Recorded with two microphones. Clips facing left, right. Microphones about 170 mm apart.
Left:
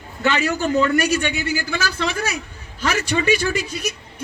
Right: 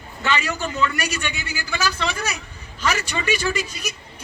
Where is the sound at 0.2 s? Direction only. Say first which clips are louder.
Left 4 dB; 60° left (ahead or behind).